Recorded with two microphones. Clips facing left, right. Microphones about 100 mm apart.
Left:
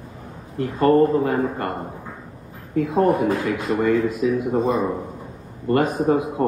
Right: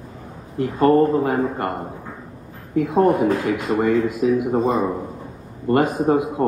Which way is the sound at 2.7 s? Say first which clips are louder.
Right 2 dB; 25° right (ahead or behind).